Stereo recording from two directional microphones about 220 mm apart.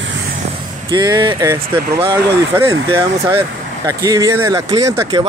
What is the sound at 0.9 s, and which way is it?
Speech, 20° right (ahead or behind).